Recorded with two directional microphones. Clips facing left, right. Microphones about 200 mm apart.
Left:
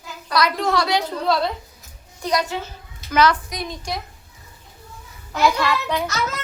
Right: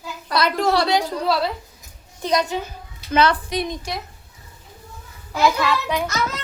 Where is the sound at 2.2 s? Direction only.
20° right (ahead or behind).